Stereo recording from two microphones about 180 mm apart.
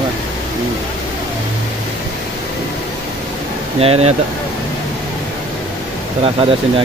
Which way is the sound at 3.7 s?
35° right (ahead or behind).